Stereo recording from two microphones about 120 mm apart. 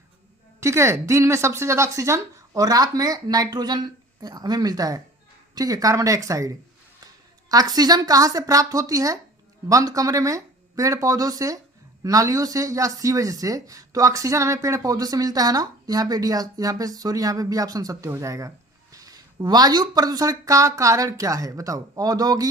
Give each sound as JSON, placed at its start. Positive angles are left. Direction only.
{"t": 0.6, "sound": "speech", "side_deg": -25}
{"t": 7.5, "sound": "a woman's voice", "side_deg": -35}